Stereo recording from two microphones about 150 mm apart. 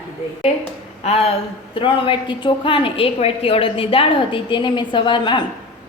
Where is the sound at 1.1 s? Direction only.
45° left (ahead or behind).